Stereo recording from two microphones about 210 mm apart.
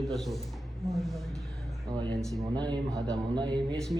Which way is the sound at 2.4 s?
20° right (ahead or behind).